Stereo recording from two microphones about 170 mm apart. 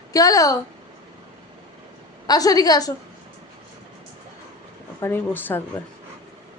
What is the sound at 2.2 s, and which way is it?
Speech, 20° left (ahead or behind).